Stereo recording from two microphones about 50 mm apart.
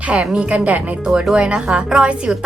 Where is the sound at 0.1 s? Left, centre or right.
Right.